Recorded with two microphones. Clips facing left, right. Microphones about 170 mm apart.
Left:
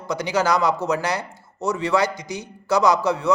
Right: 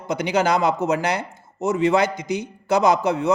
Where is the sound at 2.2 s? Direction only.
55° right (ahead or behind).